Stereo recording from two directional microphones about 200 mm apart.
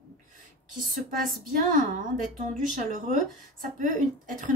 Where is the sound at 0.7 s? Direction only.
40° right (ahead or behind).